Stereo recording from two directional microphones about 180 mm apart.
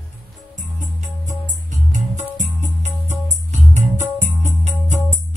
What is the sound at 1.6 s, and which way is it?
Music, 40° right (ahead or behind).